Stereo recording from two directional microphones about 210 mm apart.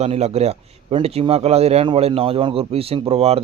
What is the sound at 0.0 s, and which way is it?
Speech, 30° right (ahead or behind).